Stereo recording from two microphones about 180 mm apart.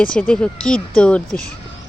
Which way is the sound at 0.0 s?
5° left (ahead or behind).